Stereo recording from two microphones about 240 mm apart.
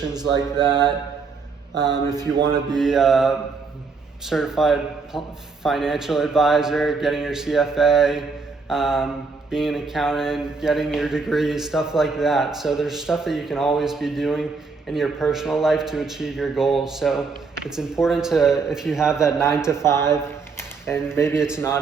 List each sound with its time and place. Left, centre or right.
0.0 s speech: centre
2.7 s speech: centre
19.7 s a man's voice: centre